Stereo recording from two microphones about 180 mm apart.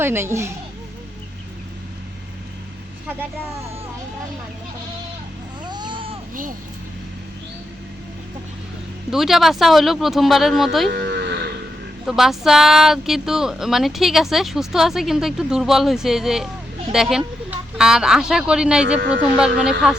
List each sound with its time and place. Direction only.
0.0 s a woman's voice: 15° right (ahead or behind)
5.6 s baby cry: 25° right (ahead or behind)
9.0 s speech: centre (ahead or behind)
10.8 s moo: 70° right (ahead or behind)
12.0 s speech: centre (ahead or behind)